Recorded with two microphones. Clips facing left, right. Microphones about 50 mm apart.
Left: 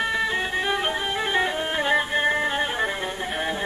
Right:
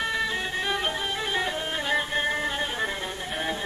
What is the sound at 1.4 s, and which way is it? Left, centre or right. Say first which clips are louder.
Music: left 5 dB; centre.